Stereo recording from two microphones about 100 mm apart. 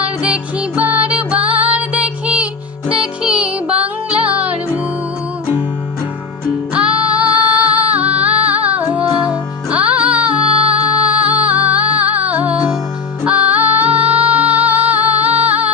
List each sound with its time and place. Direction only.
0.0 s music: 10° right (ahead or behind)
6.7 s female singing: 10° right (ahead or behind)
13.2 s music: 15° right (ahead or behind)